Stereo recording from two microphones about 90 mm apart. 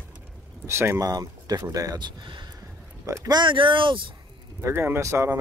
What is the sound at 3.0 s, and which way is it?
Speech, 35° right (ahead or behind).